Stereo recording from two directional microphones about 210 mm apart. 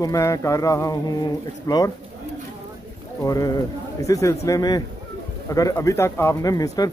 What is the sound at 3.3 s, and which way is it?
Speech, 15° left (ahead or behind).